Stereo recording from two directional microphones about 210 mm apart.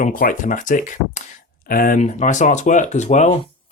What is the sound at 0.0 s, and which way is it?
Speech, 40° left (ahead or behind).